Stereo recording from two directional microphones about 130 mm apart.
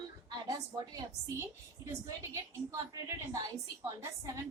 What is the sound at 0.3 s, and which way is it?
A woman's voice, 30° right (ahead or behind).